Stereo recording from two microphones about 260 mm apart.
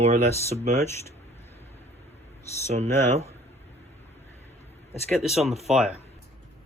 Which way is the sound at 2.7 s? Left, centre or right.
Right.